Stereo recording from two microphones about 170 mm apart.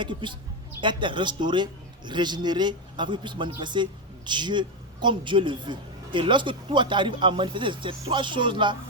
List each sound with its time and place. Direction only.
0.0 s a man's voice: 30° right (ahead or behind)